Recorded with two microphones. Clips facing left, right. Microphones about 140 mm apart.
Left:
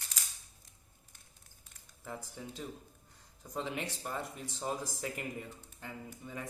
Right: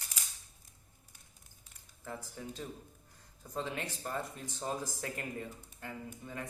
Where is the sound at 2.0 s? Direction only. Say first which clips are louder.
Right 1 dB; 15° left (ahead or behind).